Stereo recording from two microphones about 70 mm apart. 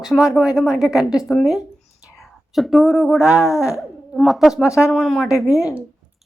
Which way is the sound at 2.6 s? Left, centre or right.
Centre.